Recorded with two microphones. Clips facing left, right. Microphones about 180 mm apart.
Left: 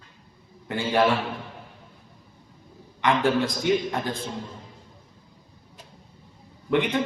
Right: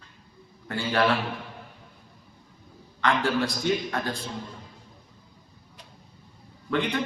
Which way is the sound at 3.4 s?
20° left (ahead or behind).